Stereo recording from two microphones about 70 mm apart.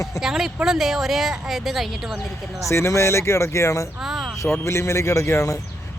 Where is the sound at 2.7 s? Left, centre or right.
Left.